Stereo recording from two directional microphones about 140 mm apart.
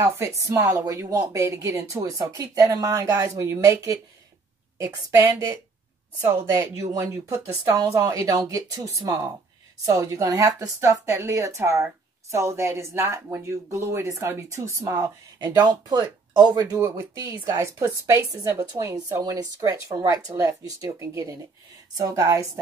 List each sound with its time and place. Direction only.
0.0 s a woman's voice: 20° right (ahead or behind)